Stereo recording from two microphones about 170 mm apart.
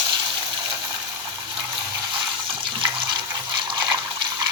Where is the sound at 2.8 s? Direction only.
25° right (ahead or behind).